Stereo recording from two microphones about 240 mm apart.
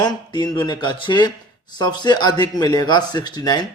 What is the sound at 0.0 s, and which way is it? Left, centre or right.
Speech, centre.